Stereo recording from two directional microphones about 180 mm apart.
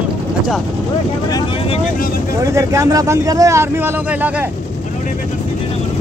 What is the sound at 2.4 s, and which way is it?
A man's voice, 15° right (ahead or behind).